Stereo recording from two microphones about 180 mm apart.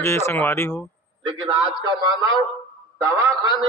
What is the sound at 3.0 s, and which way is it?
Speech, 15° right (ahead or behind).